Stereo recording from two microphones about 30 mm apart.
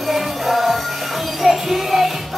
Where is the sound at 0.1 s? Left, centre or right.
Centre.